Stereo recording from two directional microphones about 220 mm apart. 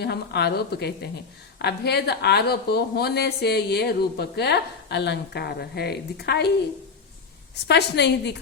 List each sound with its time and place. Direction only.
0.0 s speech: 50° left (ahead or behind)
7.7 s speech: 50° left (ahead or behind)